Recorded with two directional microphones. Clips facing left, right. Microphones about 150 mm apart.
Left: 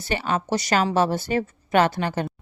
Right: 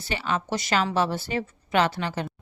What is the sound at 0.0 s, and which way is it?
A woman's voice, 45° left (ahead or behind).